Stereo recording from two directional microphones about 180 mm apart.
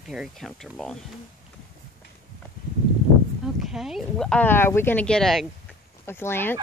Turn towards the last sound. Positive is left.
turn(degrees=10)  # may be behind; listen again after turning